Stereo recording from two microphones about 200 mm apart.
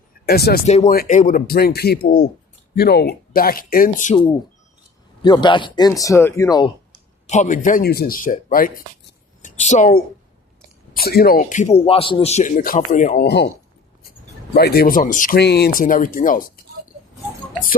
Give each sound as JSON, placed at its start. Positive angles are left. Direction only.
{"t": 0.3, "sound": "speech", "side_deg": 50}
{"t": 0.7, "sound": "speech", "side_deg": 40}
{"t": 5.2, "sound": "speech", "side_deg": 20}
{"t": 7.3, "sound": "a woman's voice", "side_deg": 40}
{"t": 10.9, "sound": "speech", "side_deg": 50}
{"t": 14.5, "sound": "speech", "side_deg": 50}